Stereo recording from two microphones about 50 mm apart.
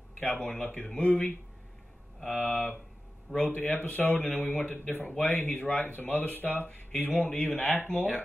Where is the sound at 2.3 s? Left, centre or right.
Left.